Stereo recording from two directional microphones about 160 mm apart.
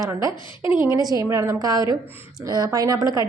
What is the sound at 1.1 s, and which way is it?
A woman's voice, 20° right (ahead or behind).